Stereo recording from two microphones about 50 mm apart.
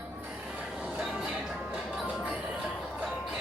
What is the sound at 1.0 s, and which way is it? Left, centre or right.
Music, centre.